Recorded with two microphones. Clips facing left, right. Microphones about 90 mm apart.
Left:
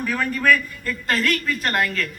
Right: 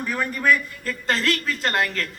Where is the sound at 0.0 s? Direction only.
15° right (ahead or behind).